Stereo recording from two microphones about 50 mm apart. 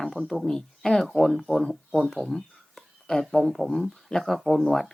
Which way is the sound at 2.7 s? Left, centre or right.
Centre.